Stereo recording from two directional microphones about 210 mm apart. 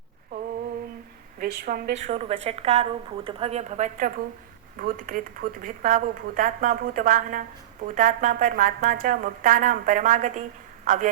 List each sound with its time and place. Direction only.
1.4 s a woman's voice: 45° right (ahead or behind)